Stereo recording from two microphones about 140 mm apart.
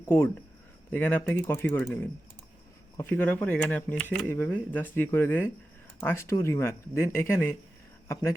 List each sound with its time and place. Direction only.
0.0 s speech: 15° left (ahead or behind)